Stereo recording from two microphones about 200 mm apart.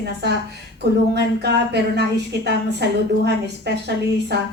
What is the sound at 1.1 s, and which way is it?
Speech, 55° right (ahead or behind).